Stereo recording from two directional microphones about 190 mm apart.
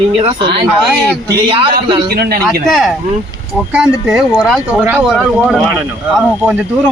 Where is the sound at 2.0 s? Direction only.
55° right (ahead or behind).